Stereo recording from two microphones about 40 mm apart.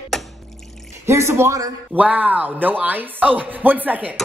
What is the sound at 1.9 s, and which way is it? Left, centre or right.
Speech, right.